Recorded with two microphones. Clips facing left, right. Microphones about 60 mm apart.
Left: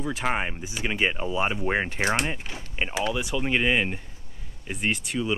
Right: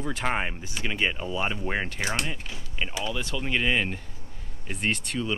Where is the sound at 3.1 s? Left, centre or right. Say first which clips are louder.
Left 2 dB; centre.